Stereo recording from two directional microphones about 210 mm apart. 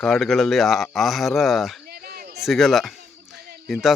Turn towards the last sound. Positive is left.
turn(degrees=0)  # may be behind; listen again after turning